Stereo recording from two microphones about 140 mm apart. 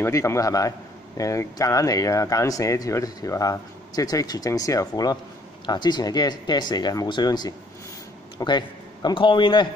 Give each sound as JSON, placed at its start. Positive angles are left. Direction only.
{"t": 0.0, "sound": "speech", "side_deg": 20}